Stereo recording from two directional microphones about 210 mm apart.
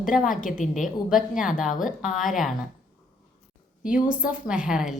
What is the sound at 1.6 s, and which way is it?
Speech, 40° left (ahead or behind).